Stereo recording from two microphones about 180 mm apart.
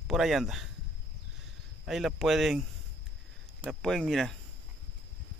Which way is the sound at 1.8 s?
Centre (ahead or behind).